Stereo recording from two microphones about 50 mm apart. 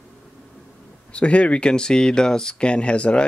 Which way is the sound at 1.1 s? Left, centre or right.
Left.